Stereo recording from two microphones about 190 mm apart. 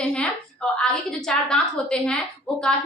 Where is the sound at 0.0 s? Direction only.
5° left (ahead or behind).